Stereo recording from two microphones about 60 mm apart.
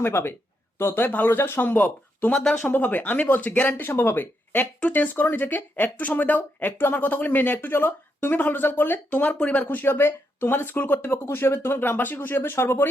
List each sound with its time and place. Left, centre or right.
0.0 s speech: left
2.3 s speech: centre
2.6 s speech: left
3.7 s speech: left
9.3 s speech: left